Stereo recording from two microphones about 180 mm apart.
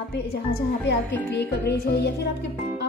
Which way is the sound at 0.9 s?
65° left (ahead or behind).